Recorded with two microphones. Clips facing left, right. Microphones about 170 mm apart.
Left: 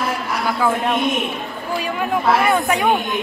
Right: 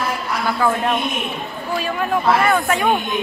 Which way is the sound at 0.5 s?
5° left (ahead or behind).